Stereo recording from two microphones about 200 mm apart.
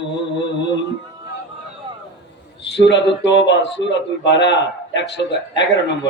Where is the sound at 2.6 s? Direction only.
60° left (ahead or behind).